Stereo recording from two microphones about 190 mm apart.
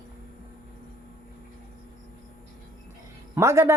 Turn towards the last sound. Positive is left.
turn(degrees=-15)  # may be behind; listen again after turning